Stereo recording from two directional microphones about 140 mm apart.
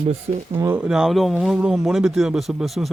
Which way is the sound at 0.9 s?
5° right (ahead or behind).